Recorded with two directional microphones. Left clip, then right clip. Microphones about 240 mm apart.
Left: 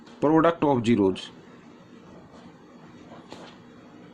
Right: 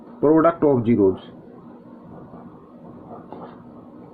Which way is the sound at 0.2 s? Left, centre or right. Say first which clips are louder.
Right 4 dB; left.